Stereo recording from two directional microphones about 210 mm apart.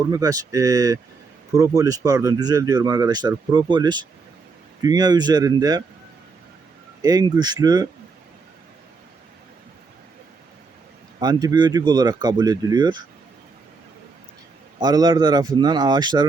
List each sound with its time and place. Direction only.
0.0 s speech: 15° right (ahead or behind)
7.0 s speech: 20° right (ahead or behind)
11.2 s speech: 20° right (ahead or behind)
14.8 s speech: 20° right (ahead or behind)